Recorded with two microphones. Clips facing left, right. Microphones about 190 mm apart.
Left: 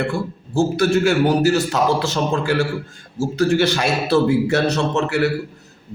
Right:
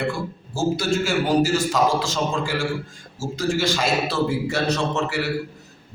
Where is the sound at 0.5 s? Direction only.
60° left (ahead or behind).